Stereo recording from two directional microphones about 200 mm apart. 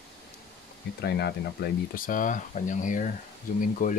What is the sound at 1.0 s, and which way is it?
Speech, 50° left (ahead or behind).